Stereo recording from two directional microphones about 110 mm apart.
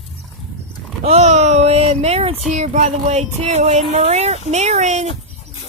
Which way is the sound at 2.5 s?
90° right.